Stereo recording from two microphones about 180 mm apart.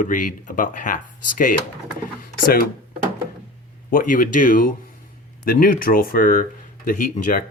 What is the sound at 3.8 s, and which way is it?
Speech, 50° left (ahead or behind).